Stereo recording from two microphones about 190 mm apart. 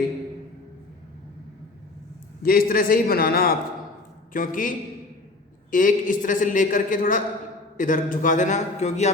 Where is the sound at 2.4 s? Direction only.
50° left (ahead or behind).